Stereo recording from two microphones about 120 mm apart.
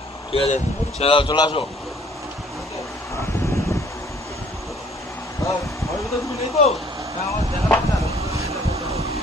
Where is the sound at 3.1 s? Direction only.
20° left (ahead or behind).